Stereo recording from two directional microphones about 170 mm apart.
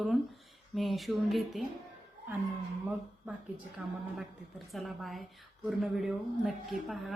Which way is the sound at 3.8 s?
5° right (ahead or behind).